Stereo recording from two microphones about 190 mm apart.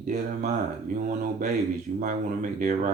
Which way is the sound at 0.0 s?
40° right (ahead or behind).